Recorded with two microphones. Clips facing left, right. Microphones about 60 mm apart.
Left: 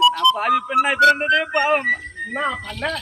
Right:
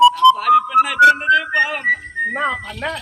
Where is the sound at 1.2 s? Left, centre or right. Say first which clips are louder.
Right 3 dB; left.